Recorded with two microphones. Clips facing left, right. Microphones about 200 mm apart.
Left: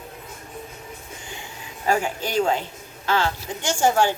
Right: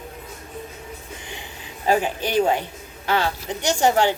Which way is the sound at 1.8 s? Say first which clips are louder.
Right 2 dB; 20° right (ahead or behind).